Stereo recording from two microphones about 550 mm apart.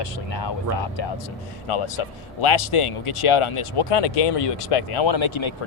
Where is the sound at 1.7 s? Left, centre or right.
Left.